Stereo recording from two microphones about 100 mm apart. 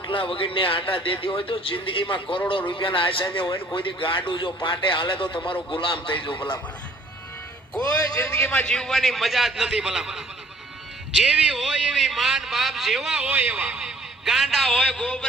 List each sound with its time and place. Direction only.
0.1 s a man's voice: 60° left (ahead or behind)
7.8 s speech: 35° left (ahead or behind)
8.3 s a man's voice: 10° left (ahead or behind)